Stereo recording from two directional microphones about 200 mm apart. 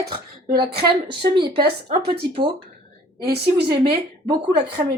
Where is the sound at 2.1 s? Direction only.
25° right (ahead or behind).